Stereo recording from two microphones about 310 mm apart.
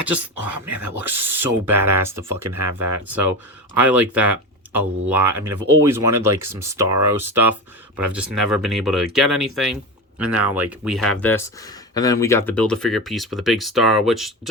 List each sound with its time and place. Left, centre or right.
0.0 s speech: centre
5.5 s speech: right
5.8 s speech: centre